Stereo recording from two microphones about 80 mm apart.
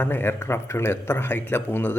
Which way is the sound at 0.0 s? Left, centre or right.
Left.